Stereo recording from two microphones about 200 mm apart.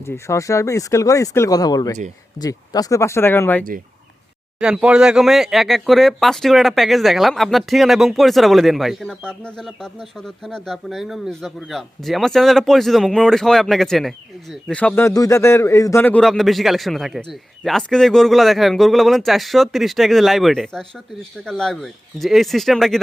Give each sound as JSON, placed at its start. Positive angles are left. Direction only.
{"t": 0.0, "sound": "a man's voice", "side_deg": 15}
{"t": 4.6, "sound": "a man's voice", "side_deg": -5}